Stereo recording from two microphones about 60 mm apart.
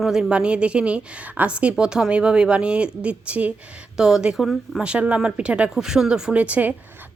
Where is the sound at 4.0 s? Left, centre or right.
Centre.